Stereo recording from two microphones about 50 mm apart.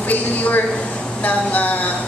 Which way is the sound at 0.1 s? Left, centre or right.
Left.